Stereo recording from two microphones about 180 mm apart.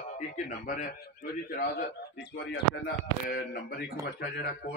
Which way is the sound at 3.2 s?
55° left (ahead or behind).